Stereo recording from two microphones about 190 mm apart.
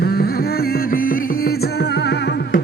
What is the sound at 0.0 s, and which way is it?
Music, 55° left (ahead or behind).